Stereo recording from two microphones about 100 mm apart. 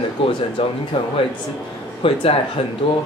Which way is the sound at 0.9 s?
55° left (ahead or behind).